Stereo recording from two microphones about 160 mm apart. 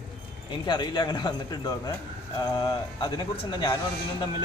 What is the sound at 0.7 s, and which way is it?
Speech, 25° left (ahead or behind).